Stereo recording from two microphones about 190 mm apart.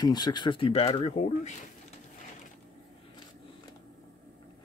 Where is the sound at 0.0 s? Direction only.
20° left (ahead or behind).